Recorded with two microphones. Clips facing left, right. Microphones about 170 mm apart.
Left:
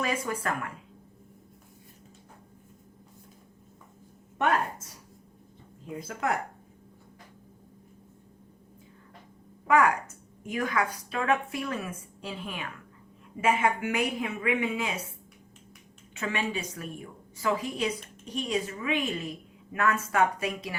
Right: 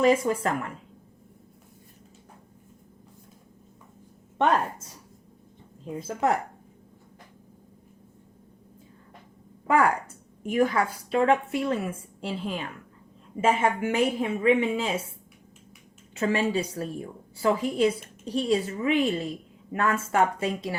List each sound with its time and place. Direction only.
0.0 s a woman's voice: 25° right (ahead or behind)
6.0 s a woman's voice: 25° right (ahead or behind)
9.6 s a woman's voice: 30° right (ahead or behind)
16.1 s a woman's voice: 35° right (ahead or behind)